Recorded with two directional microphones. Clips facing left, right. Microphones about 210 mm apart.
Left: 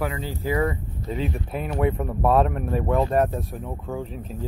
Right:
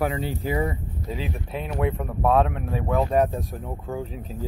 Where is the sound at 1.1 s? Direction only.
Centre (ahead or behind).